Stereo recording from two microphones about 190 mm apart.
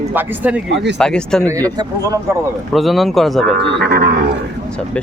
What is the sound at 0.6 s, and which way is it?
Speech, 65° right (ahead or behind).